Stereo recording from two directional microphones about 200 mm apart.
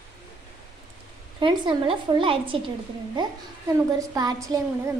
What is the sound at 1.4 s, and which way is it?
A child's voice, 25° right (ahead or behind).